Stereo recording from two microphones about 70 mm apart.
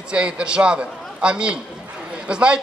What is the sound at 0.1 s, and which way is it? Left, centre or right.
A man's voice, centre.